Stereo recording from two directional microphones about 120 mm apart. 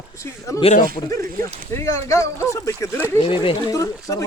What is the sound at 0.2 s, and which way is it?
Speech, 25° left (ahead or behind).